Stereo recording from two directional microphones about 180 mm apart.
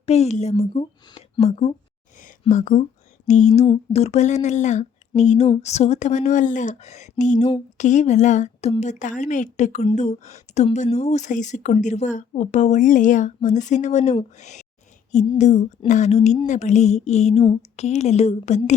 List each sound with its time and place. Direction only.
0.0 s a woman's voice: 35° left (ahead or behind)